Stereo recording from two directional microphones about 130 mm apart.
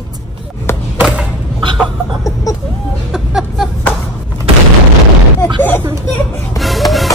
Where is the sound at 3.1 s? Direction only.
Centre (ahead or behind).